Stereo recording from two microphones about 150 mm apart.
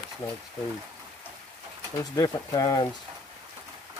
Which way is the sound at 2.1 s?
25° left (ahead or behind).